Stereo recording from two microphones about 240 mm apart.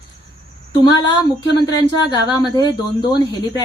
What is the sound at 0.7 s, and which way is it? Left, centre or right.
Speech, centre.